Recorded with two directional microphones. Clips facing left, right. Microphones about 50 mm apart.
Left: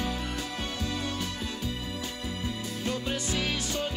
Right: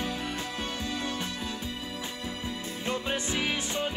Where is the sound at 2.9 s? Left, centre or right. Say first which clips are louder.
Right 1 dB; right.